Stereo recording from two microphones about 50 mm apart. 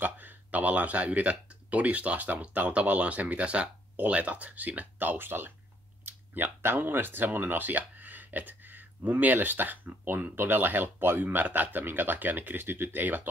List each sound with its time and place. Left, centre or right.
0.0 s speech: right